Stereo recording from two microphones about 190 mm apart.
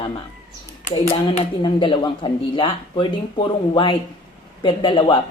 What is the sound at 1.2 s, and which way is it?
Speech, 25° left (ahead or behind).